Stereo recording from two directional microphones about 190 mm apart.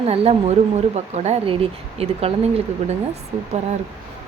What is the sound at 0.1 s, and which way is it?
A woman's voice, 35° right (ahead or behind).